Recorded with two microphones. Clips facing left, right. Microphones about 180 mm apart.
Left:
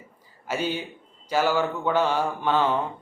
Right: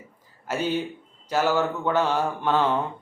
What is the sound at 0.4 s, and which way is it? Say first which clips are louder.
A man's voice: right 2 dB; 10° left (ahead or behind).